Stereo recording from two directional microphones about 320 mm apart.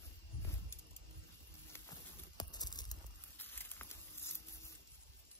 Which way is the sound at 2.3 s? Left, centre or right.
Centre.